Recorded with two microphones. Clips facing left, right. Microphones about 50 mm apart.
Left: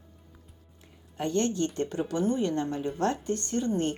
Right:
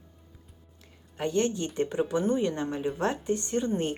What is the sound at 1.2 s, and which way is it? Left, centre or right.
Speech, centre.